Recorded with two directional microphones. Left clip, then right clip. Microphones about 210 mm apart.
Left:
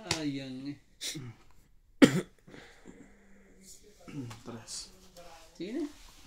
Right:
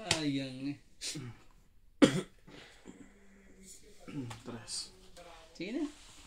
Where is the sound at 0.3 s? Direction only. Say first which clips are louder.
Right 2 dB; 35° right (ahead or behind).